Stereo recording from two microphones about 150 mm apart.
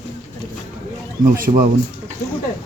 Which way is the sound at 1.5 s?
45° right (ahead or behind).